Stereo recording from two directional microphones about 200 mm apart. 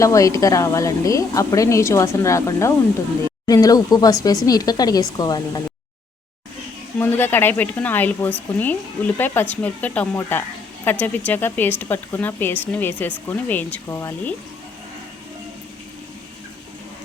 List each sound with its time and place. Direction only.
0.0 s speech: 15° left (ahead or behind)
7.0 s speech: 10° left (ahead or behind)